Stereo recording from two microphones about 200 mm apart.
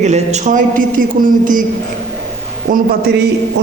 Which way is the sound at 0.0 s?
35° right (ahead or behind).